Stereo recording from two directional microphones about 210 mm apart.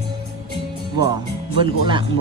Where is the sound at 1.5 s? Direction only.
25° right (ahead or behind).